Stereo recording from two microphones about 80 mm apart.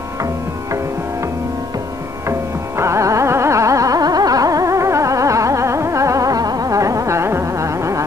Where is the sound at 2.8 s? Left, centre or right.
Right.